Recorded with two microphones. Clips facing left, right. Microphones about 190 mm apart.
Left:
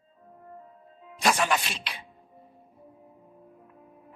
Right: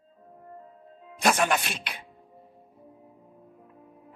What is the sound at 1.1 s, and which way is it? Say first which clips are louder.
Speech: right 1 dB; 50° right (ahead or behind).